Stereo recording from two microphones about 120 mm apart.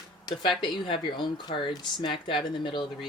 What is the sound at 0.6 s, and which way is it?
Speech, 45° left (ahead or behind).